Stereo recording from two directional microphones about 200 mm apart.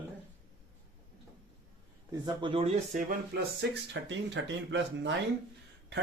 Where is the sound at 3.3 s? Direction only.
50° right (ahead or behind).